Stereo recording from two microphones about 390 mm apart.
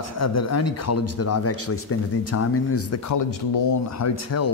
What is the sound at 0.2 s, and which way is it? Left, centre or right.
A man's voice, left.